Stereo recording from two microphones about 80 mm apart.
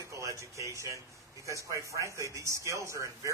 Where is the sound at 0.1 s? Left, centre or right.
Right.